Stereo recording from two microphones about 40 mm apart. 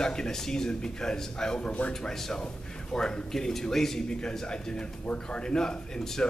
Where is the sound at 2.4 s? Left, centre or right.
Left.